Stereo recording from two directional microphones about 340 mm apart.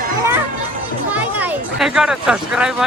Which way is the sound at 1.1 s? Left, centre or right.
Centre.